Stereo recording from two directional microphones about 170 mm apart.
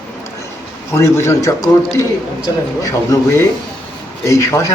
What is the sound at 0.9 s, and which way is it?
A man's voice, 15° left (ahead or behind).